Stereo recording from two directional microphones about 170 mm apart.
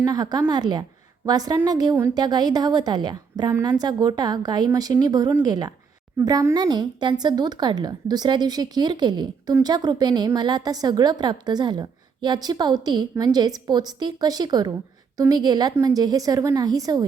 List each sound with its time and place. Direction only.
0.0 s speech: 20° right (ahead or behind)